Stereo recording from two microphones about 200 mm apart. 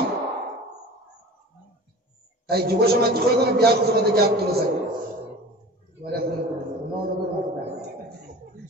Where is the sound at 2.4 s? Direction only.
50° right (ahead or behind).